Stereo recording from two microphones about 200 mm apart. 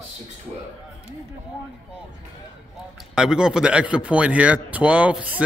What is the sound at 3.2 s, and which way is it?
A man's voice, 5° right (ahead or behind).